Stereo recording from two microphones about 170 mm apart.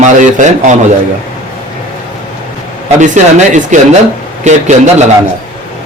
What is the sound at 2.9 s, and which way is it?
A man's voice, 45° right (ahead or behind).